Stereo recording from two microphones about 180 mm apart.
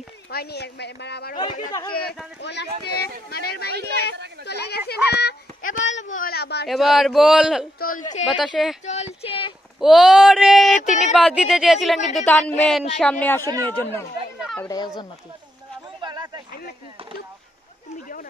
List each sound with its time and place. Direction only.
0.3 s a woman's voice: 60° left (ahead or behind)
1.9 s a child's voice: 55° left (ahead or behind)
2.4 s a child's voice: 70° left (ahead or behind)
6.7 s speech: centre (ahead or behind)
7.8 s speech: 45° left (ahead or behind)
8.3 s speech: centre (ahead or behind)
8.8 s speech: 40° left (ahead or behind)
9.8 s speech: centre (ahead or behind)
14.6 s speech: 20° left (ahead or behind)
16.0 s a sound: 25° right (ahead or behind)